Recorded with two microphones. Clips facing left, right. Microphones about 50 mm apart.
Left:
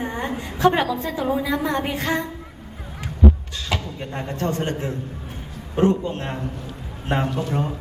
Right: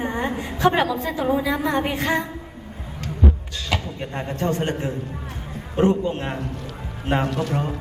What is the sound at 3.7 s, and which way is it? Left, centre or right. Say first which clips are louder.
A woman's voice: right 1 dB; centre.